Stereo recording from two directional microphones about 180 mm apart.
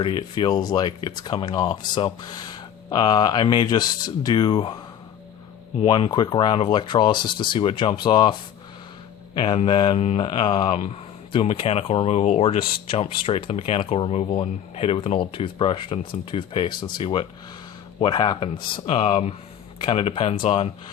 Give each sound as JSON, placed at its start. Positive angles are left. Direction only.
{"t": 0.0, "sound": "speech", "side_deg": 30}
{"t": 5.8, "sound": "speech", "side_deg": 25}